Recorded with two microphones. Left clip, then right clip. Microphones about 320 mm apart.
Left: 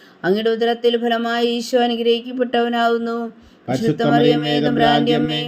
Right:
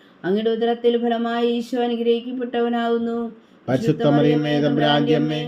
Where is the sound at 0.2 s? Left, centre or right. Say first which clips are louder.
Left 3 dB; left.